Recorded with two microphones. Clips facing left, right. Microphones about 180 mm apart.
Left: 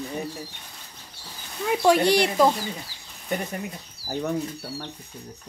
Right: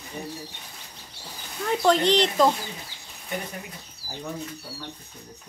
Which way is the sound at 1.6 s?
10° left (ahead or behind).